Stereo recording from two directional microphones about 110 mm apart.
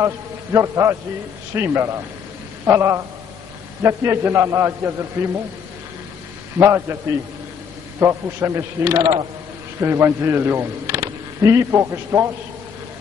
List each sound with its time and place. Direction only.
0.0 s a man's voice: 25° right (ahead or behind)
6.6 s a man's voice: 25° right (ahead or behind)
9.0 s speech: 45° right (ahead or behind)
9.8 s speech: 25° right (ahead or behind)